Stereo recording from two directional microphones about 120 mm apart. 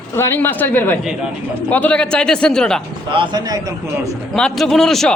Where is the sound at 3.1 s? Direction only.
45° right (ahead or behind).